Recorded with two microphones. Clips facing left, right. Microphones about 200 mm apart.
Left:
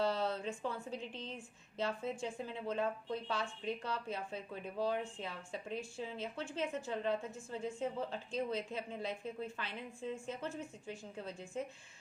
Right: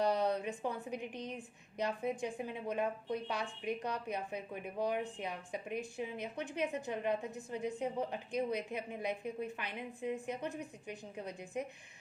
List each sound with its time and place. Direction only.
0.0 s a woman's voice: 15° right (ahead or behind)